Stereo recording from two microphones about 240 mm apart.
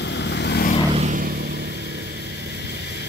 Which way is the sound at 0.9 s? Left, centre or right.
Right.